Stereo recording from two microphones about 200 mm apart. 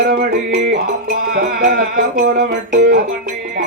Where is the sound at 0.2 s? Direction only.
55° right (ahead or behind).